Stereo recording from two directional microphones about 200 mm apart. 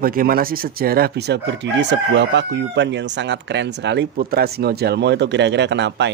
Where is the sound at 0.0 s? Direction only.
45° right (ahead or behind).